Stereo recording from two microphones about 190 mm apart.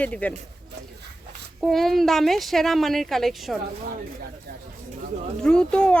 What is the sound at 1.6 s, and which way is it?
A woman's voice, centre (ahead or behind).